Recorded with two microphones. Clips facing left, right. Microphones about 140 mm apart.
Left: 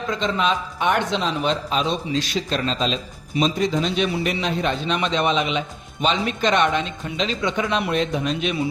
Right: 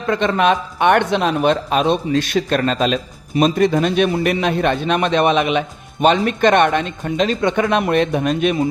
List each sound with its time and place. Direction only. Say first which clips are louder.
0.1 s a man's voice: right 7 dB; 60° right (ahead or behind)